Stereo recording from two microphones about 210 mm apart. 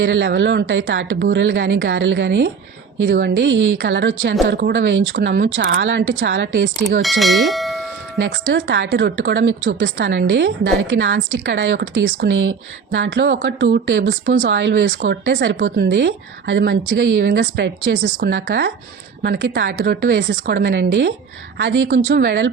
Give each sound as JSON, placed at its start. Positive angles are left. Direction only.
{"t": 0.0, "sound": "a woman's voice", "side_deg": -65}
{"t": 7.0, "sound": "speech", "side_deg": 0}
{"t": 8.2, "sound": "a woman's voice", "side_deg": -60}